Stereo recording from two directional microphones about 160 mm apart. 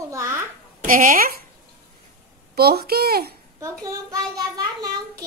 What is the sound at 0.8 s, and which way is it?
Speech, 60° right (ahead or behind).